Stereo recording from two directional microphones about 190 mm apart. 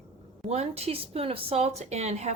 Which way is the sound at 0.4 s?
35° right (ahead or behind).